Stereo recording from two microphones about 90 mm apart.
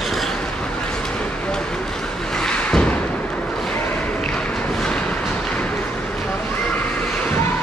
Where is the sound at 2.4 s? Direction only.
10° left (ahead or behind).